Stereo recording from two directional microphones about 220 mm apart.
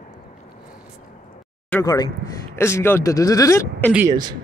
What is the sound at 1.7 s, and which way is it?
Speech, 15° left (ahead or behind).